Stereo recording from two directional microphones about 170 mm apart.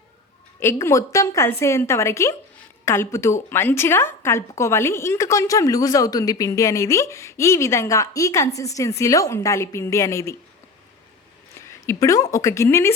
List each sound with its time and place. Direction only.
0.6 s a woman's voice: 15° left (ahead or behind)
11.6 s a woman's voice: 15° left (ahead or behind)